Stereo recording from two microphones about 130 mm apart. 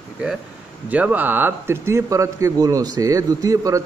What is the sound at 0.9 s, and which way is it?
Speech, 10° right (ahead or behind).